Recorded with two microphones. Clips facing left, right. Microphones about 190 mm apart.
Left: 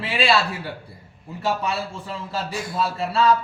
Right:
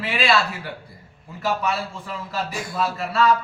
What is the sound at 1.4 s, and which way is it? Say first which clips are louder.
A man's voice: even; 30° left (ahead or behind).